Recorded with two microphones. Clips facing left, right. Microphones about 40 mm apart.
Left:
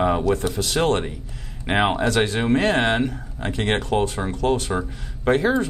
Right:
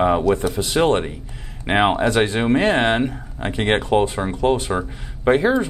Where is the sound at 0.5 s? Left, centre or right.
Right.